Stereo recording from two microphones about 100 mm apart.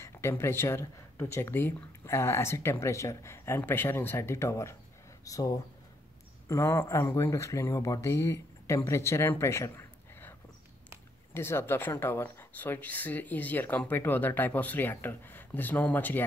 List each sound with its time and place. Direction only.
0.0 s speech: 25° left (ahead or behind)
11.3 s speech: 25° left (ahead or behind)